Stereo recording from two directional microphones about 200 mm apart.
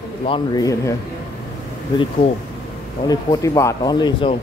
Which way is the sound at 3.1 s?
15° left (ahead or behind).